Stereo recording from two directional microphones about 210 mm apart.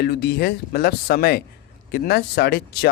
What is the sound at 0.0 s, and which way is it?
A man's voice, 50° left (ahead or behind).